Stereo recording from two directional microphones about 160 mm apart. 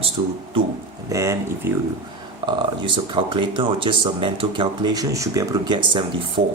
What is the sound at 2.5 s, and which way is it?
Speech, 30° right (ahead or behind).